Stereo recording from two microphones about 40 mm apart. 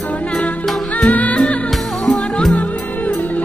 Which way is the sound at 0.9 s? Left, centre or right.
Left.